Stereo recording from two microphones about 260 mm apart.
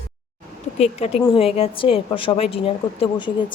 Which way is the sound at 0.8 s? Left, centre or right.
Left.